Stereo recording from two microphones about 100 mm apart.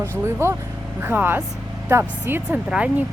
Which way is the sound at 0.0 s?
25° right (ahead or behind).